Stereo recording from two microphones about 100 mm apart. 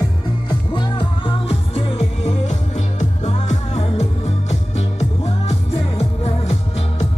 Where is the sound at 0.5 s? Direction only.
55° left (ahead or behind); by 5.6 s 90° left.